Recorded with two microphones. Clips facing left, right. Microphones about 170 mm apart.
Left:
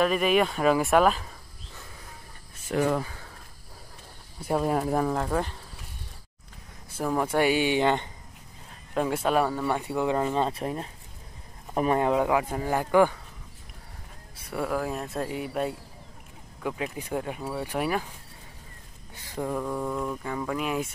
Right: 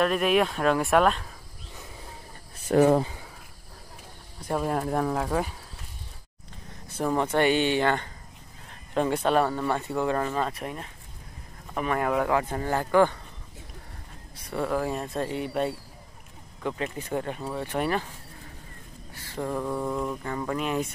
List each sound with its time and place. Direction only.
0.0 s speech: centre (ahead or behind)
2.7 s speech: 40° right (ahead or behind)
3.0 s cricket: 20° right (ahead or behind)
4.4 s speech: 5° left (ahead or behind)
7.0 s speech: 5° left (ahead or behind)
8.9 s speech: 5° left (ahead or behind)
10.4 s speech: 30° left (ahead or behind); by 13.2 s 10° left (ahead or behind)
14.3 s speech: 5° left (ahead or behind)
19.1 s a sound: 15° left (ahead or behind)
19.6 s speech: 5° right (ahead or behind)